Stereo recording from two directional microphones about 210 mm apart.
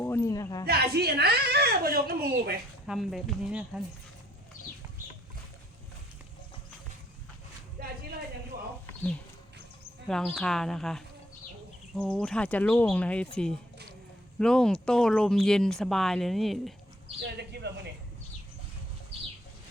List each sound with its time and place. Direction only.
0.0 s a sound: 10° left (ahead or behind)
0.6 s a woman's voice: 50° right (ahead or behind)
2.8 s speech: centre (ahead or behind)
8.5 s a sound: 40° right (ahead or behind)
10.1 s speech: centre (ahead or behind)
17.3 s speech: 50° right (ahead or behind)